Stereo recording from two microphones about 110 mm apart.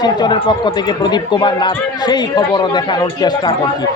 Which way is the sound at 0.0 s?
40° left (ahead or behind).